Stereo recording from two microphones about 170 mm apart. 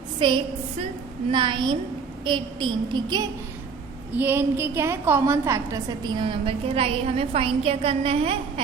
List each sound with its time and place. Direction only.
0.2 s a woman's voice: 30° right (ahead or behind)
4.2 s a woman's voice: 15° right (ahead or behind); by 8.6 s 35° right (ahead or behind)